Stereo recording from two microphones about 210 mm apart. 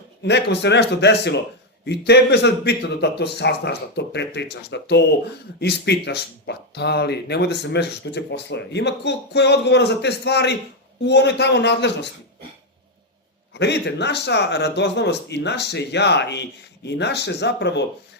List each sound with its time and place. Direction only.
0.2 s a man's voice: 55° left (ahead or behind)
13.5 s speech: 55° left (ahead or behind)